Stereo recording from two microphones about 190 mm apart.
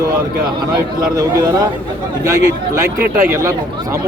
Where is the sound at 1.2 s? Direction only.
15° right (ahead or behind).